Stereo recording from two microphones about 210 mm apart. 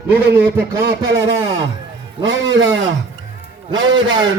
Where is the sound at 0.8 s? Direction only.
55° right (ahead or behind).